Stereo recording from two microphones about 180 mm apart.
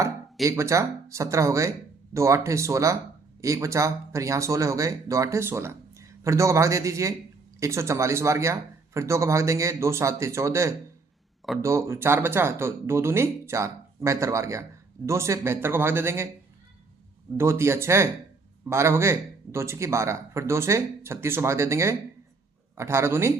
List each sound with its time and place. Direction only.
0.4 s speech: 15° right (ahead or behind)
17.3 s speech: 15° right (ahead or behind)